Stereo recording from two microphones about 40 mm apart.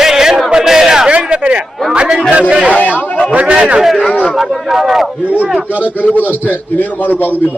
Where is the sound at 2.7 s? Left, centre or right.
Left.